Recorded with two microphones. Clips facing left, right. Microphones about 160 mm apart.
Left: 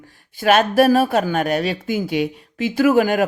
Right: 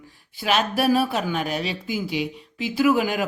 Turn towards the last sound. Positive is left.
turn(degrees=50)  # may be behind; listen again after turning